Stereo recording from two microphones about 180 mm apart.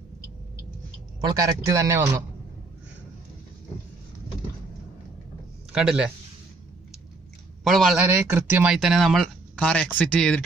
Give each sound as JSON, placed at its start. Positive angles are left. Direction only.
{"t": 1.2, "sound": "a man's voice", "side_deg": -20}
{"t": 5.7, "sound": "a man's voice", "side_deg": -5}
{"t": 7.6, "sound": "speech", "side_deg": 0}
{"t": 8.0, "sound": "a man's voice", "side_deg": -10}
{"t": 8.7, "sound": "speech", "side_deg": 0}